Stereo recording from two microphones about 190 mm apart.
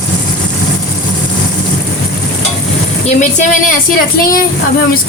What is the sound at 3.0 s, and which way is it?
A woman's voice, 40° left (ahead or behind).